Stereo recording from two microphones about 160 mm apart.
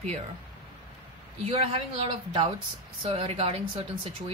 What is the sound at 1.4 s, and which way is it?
Speech, 35° right (ahead or behind).